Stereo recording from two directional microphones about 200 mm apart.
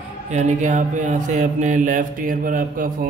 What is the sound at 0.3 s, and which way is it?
Speech, 35° right (ahead or behind).